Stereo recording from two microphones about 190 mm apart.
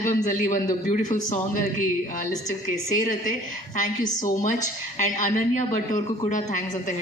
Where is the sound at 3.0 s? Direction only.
45° left (ahead or behind).